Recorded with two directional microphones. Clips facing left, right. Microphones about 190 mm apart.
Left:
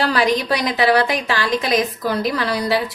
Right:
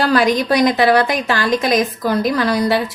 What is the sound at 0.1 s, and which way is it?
A woman's voice, 45° right (ahead or behind).